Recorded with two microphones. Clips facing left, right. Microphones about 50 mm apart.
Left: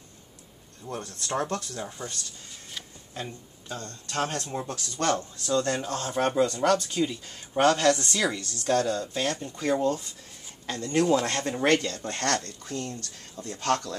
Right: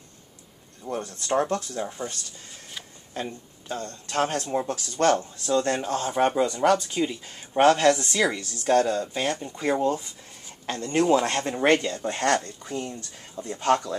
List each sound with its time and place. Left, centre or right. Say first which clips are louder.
1.0 s speech: right 5 dB; right
3.2 s speech: right 4 dB; right